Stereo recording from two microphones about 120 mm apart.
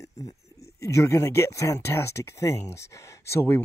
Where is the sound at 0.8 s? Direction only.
25° left (ahead or behind).